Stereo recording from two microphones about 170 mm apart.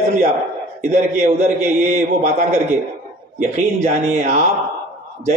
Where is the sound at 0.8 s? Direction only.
40° right (ahead or behind).